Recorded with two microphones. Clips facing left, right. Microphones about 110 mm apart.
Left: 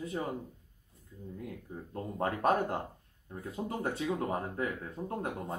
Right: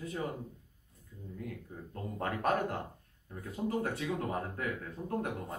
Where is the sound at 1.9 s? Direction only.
25° left (ahead or behind).